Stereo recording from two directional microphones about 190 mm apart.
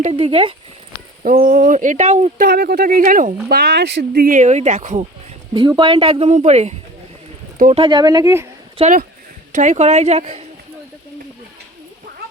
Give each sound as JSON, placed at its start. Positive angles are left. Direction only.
{"t": 0.0, "sound": "speech", "side_deg": -30}
{"t": 1.2, "sound": "speech", "side_deg": -45}
{"t": 2.5, "sound": "speech", "side_deg": -55}
{"t": 3.5, "sound": "speech", "side_deg": -60}
{"t": 5.5, "sound": "a woman's voice", "side_deg": -25}
{"t": 7.9, "sound": "speech", "side_deg": -20}
{"t": 8.8, "sound": "a woman's voice", "side_deg": -45}